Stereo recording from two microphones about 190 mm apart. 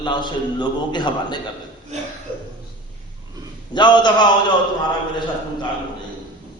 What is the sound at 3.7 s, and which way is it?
Speech, 25° left (ahead or behind).